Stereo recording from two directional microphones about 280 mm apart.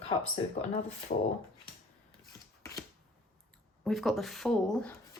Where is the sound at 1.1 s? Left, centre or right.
Left.